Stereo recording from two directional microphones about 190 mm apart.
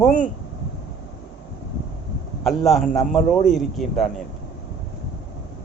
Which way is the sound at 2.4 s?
Centre (ahead or behind).